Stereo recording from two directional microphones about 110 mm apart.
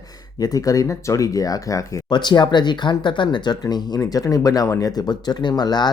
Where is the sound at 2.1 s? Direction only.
45° left (ahead or behind).